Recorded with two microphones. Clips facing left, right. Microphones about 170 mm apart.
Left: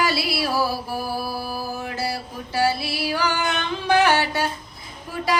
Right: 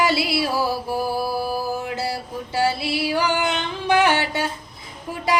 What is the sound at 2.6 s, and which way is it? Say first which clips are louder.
Female singing: right 1 dB; 20° right (ahead or behind).